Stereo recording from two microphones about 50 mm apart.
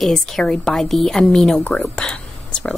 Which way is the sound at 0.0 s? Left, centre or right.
Centre.